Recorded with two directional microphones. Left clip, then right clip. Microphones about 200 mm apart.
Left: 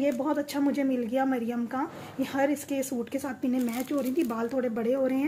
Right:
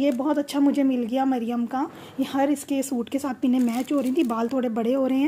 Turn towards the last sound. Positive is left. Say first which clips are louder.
# right 4 dB
turn(degrees=-45)  # may be behind; listen again after turning